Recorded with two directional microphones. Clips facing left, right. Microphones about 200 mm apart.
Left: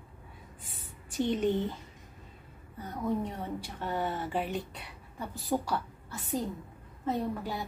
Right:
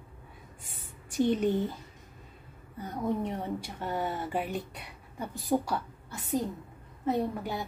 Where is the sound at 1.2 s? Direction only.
10° right (ahead or behind).